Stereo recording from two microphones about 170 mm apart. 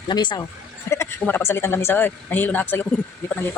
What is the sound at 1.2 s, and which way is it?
Speech, 15° left (ahead or behind).